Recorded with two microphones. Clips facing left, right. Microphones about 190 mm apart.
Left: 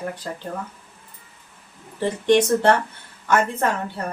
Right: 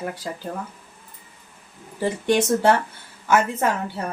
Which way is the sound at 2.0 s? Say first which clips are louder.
Left 3 dB; 10° right (ahead or behind).